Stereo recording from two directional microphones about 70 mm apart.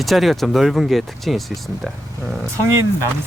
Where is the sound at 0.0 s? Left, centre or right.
Centre.